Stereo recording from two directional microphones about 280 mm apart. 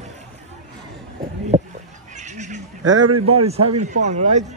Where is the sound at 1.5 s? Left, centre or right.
Centre.